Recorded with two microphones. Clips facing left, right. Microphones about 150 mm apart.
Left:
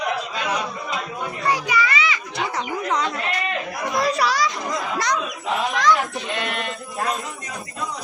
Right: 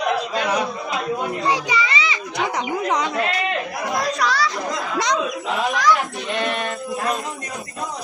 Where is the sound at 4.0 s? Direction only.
5° left (ahead or behind).